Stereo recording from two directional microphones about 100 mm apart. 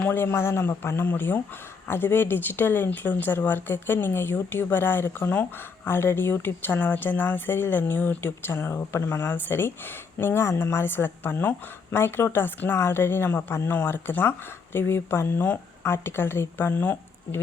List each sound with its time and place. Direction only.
0.0 s speech: 20° left (ahead or behind)